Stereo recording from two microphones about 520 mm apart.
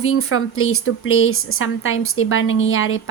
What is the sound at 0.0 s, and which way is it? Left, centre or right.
Speech, left.